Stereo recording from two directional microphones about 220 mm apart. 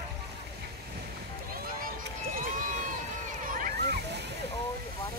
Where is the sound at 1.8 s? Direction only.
40° right (ahead or behind).